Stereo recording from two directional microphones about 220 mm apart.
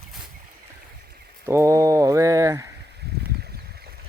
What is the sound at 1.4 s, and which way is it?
Speech, 10° right (ahead or behind).